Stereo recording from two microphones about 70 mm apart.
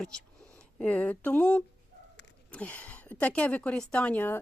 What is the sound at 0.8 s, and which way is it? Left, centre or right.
Speech, left.